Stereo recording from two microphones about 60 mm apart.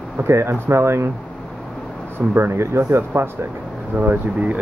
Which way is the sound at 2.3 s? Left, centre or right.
Right.